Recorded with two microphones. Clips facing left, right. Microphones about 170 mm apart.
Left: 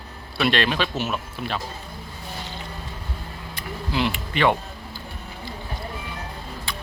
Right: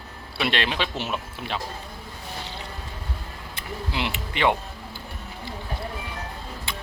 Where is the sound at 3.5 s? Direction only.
20° right (ahead or behind).